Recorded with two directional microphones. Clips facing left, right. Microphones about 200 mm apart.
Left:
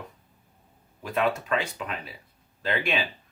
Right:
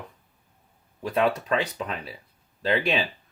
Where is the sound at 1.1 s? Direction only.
35° right (ahead or behind).